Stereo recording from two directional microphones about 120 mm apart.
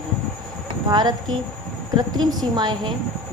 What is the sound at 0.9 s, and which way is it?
A woman's voice, 40° right (ahead or behind).